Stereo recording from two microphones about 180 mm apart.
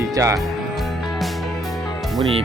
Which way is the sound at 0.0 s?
15° right (ahead or behind).